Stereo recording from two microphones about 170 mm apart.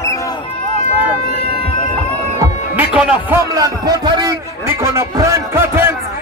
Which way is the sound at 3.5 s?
20° right (ahead or behind).